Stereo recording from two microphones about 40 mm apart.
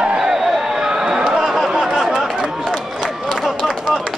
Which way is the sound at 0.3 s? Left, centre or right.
Centre.